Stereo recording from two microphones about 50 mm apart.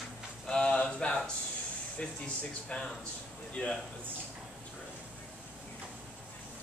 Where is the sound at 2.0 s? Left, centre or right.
Left.